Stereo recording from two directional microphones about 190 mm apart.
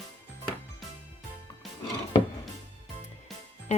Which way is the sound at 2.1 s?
25° left (ahead or behind).